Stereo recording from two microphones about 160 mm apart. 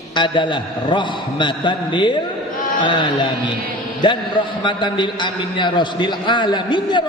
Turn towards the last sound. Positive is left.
turn(degrees=30)  # may be behind; listen again after turning